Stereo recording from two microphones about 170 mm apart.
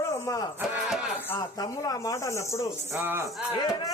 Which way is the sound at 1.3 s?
20° left (ahead or behind).